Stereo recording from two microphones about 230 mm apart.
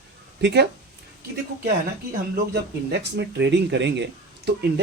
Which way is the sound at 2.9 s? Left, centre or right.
Right.